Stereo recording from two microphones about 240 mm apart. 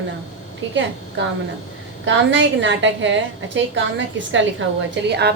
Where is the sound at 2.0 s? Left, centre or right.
Right.